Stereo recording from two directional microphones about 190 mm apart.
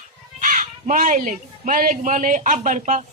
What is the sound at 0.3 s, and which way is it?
Speech, 45° right (ahead or behind).